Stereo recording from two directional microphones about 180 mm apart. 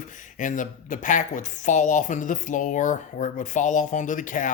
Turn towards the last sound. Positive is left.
turn(degrees=45)  # may be behind; listen again after turning